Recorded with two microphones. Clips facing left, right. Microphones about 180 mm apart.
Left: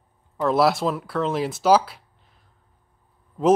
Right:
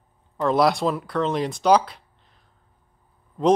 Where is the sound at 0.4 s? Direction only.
5° left (ahead or behind).